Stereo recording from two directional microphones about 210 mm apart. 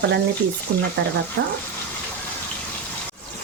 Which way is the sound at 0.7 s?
90° right.